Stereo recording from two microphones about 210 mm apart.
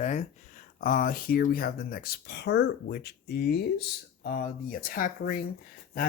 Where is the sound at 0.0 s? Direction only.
35° left (ahead or behind).